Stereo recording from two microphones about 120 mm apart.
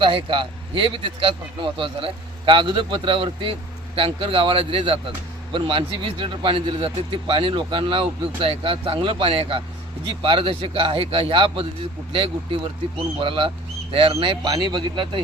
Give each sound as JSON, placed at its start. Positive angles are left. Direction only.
{"t": 0.0, "sound": "speech", "side_deg": -45}